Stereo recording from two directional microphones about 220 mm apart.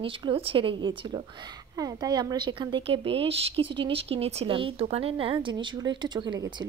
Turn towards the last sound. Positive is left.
turn(degrees=-20)  # may be behind; listen again after turning